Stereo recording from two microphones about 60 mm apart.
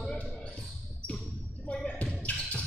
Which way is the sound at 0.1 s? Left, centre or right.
Centre.